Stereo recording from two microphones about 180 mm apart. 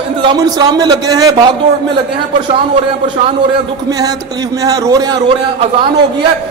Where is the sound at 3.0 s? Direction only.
25° right (ahead or behind).